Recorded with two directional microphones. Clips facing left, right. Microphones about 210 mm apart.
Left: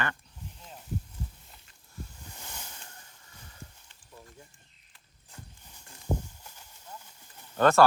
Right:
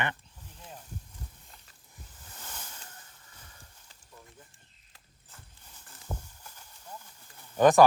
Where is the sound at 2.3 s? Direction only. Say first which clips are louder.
Left 1 dB; 10° left (ahead or behind).